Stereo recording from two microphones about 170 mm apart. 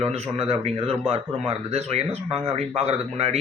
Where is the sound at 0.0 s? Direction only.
40° right (ahead or behind).